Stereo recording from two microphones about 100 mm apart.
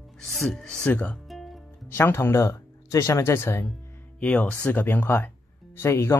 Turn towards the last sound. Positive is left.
turn(degrees=25)  # may be behind; listen again after turning